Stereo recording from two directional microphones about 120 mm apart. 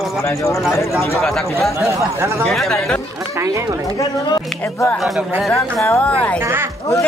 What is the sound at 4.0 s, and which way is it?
Speech, 35° left (ahead or behind).